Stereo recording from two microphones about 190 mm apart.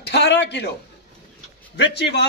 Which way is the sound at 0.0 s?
60° left (ahead or behind).